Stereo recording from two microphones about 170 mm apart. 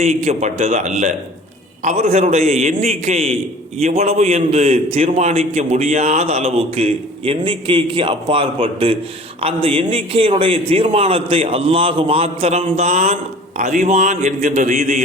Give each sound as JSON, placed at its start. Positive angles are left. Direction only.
{"t": 0.0, "sound": "a man's voice", "side_deg": -40}